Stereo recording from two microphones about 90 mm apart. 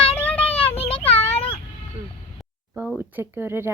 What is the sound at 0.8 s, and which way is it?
Child singing, 90° left.